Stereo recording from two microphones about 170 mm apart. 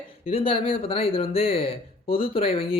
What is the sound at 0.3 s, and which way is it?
Speech, 35° left (ahead or behind).